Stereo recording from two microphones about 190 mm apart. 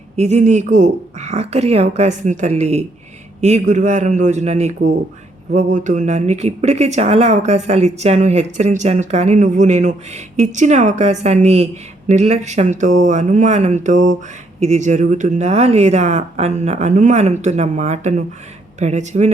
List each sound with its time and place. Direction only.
0.2 s speech: 35° right (ahead or behind)